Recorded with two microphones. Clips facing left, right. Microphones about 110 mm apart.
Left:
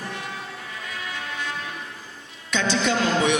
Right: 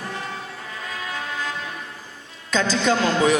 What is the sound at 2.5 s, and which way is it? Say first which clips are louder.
Speech: right 3 dB; 35° right (ahead or behind).